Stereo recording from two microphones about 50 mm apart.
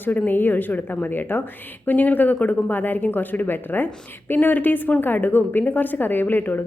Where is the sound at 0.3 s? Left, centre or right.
Left.